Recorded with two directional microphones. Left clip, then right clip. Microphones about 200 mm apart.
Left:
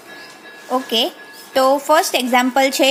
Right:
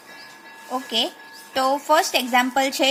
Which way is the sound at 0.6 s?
10° left (ahead or behind).